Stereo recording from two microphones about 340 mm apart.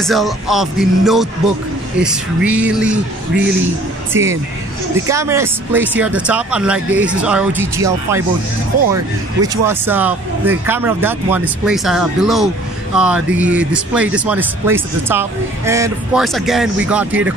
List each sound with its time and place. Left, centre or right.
0.0 s speech: centre
4.1 s speech: centre